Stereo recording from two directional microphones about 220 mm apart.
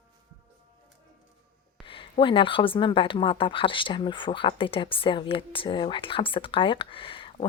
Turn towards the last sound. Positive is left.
turn(degrees=25)  # may be behind; listen again after turning